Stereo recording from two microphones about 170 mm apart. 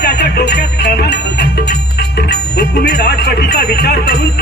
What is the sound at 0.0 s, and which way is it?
Music, 75° left (ahead or behind).